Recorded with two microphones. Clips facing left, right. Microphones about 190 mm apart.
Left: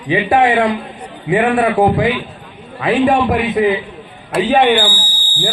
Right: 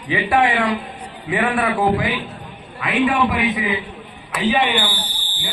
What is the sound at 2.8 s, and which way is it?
A man's voice, 35° left (ahead or behind).